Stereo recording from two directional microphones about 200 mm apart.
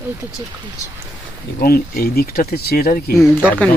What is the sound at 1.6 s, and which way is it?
Speech, 45° left (ahead or behind).